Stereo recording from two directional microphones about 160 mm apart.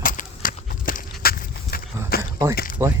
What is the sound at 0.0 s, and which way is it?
Walk, 60° left (ahead or behind).